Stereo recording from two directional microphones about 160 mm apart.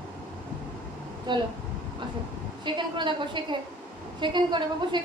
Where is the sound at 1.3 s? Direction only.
30° right (ahead or behind).